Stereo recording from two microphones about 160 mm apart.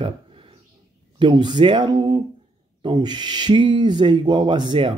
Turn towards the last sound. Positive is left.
turn(degrees=-30)  # may be behind; listen again after turning